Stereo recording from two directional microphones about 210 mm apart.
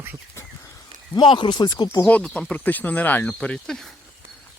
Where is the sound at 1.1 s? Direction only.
20° left (ahead or behind).